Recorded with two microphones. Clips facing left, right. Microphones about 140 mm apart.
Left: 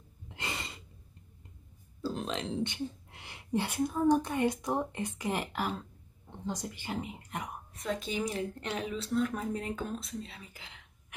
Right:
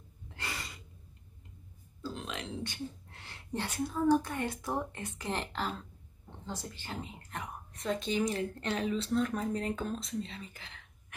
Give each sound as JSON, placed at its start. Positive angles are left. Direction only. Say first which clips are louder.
{"t": 0.3, "sound": "gasp", "louder": "left 2 dB", "side_deg": 20}
{"t": 2.0, "sound": "speech", "louder": "left 5 dB", "side_deg": 35}
{"t": 7.7, "sound": "speech", "louder": "right 1 dB", "side_deg": 0}
{"t": 8.1, "sound": "speech", "louder": "right 2 dB", "side_deg": 10}